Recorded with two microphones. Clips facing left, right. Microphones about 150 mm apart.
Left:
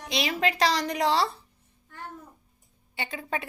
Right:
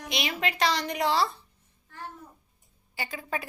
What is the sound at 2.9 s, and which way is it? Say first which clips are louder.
Speech: left 1 dB; 30° left (ahead or behind).